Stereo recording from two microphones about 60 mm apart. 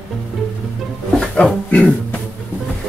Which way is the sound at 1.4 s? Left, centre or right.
Left.